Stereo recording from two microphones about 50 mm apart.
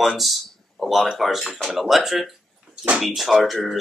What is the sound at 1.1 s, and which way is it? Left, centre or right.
Speech, centre.